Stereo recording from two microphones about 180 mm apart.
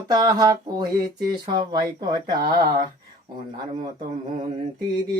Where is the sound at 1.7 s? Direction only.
25° right (ahead or behind).